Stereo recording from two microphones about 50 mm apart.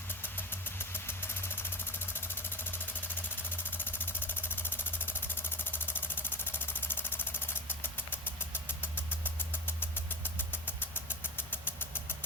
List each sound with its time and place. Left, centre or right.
0.1 s vehicle: left